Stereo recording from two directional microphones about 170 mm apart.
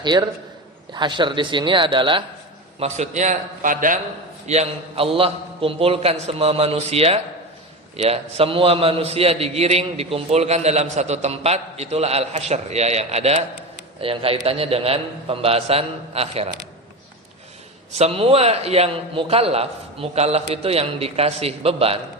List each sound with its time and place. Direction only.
0.0 s speech: 25° right (ahead or behind)
2.8 s a man's voice: 40° right (ahead or behind)
4.4 s a man's voice: 40° right (ahead or behind)
17.9 s a man's voice: 35° right (ahead or behind)